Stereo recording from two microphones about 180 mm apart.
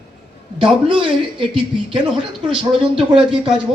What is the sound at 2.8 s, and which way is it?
Speech, 30° right (ahead or behind).